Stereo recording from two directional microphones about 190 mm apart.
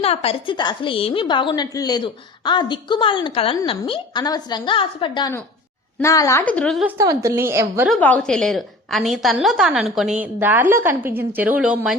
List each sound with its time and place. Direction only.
0.0 s a woman's voice: 30° left (ahead or behind); by 6.8 s 5° left (ahead or behind)
6.8 s a woman's voice: 15° right (ahead or behind)
7.9 s a woman's voice: 5° left (ahead or behind)